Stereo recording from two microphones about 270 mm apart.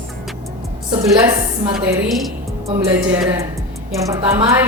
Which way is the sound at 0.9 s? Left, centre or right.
Centre.